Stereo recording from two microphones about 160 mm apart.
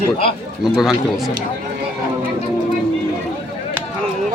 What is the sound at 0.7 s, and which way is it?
Speech, 5° right (ahead or behind).